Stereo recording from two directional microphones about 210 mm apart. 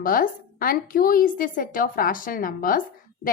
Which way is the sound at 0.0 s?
40° left (ahead or behind).